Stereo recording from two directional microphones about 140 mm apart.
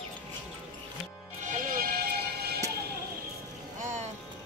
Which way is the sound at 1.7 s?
90° right.